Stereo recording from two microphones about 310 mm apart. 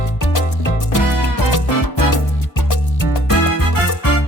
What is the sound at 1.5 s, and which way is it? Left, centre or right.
Music, left.